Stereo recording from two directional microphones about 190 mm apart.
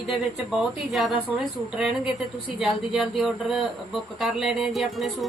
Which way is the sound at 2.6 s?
Centre (ahead or behind).